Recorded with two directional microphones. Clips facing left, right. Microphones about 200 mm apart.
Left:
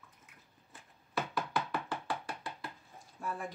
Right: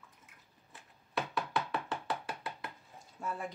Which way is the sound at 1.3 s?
Centre (ahead or behind).